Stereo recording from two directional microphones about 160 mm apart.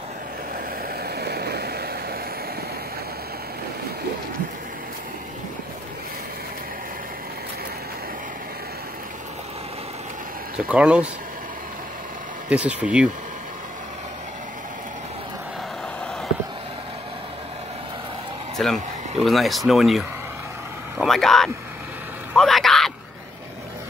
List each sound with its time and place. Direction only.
1.0 s vehicle: 80° right
10.7 s speech: 5° right (ahead or behind)
12.4 s speech: 10° right (ahead or behind)
18.6 s speech: centre (ahead or behind)
22.3 s a sound: centre (ahead or behind)